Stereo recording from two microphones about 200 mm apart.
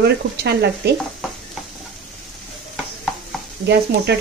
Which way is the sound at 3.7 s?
55° right (ahead or behind).